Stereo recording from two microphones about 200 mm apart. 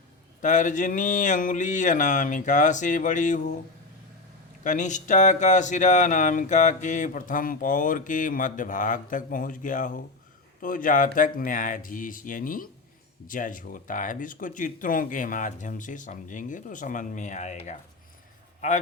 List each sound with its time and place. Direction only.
0.4 s speech: 40° left (ahead or behind)
4.6 s speech: 40° left (ahead or behind)